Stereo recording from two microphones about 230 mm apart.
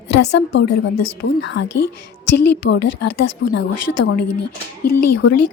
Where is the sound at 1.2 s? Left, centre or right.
Left.